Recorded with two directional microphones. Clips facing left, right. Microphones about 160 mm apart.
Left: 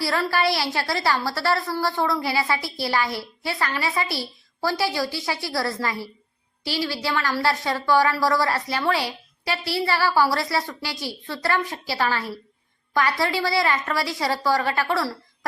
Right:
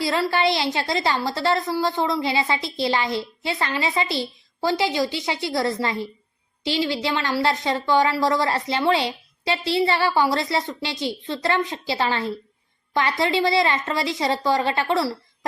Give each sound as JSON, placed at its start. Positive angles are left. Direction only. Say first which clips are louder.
{"t": 0.0, "sound": "a woman's voice", "louder": "right 2 dB", "side_deg": -20}